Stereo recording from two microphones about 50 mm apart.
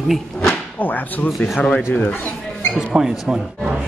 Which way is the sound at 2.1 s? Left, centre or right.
Left.